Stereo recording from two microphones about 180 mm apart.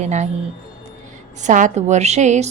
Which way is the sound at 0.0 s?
40° right (ahead or behind).